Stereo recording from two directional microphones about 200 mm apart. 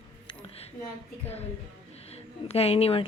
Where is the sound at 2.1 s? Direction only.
30° left (ahead or behind).